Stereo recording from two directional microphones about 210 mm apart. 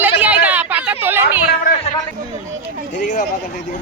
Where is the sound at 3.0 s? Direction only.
35° left (ahead or behind).